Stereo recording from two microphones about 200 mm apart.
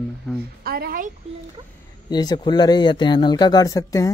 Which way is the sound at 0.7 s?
50° right (ahead or behind).